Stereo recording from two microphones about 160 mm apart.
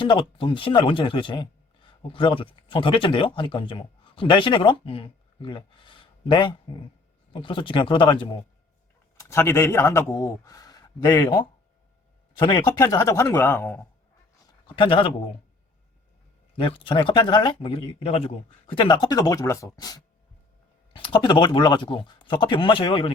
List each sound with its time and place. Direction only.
0.0 s speech: 30° left (ahead or behind)
9.1 s speech: 15° left (ahead or behind)
14.8 s speech: 30° left (ahead or behind)
16.6 s speech: 30° left (ahead or behind)